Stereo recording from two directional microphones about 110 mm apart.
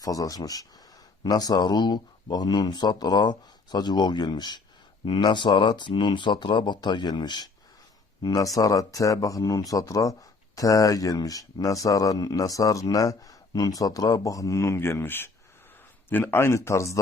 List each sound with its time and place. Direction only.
0.0 s speech: 35° left (ahead or behind)